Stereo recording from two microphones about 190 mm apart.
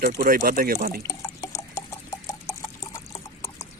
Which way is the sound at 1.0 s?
15° left (ahead or behind).